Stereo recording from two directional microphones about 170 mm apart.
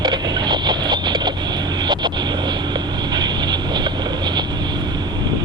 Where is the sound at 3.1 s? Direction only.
25° right (ahead or behind).